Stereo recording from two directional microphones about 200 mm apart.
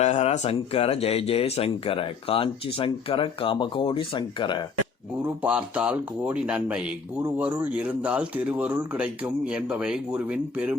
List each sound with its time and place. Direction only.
0.0 s speech: 30° left (ahead or behind)
5.2 s speech: 5° right (ahead or behind)